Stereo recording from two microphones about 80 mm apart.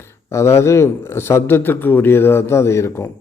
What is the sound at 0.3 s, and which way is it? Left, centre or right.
A man's voice, left.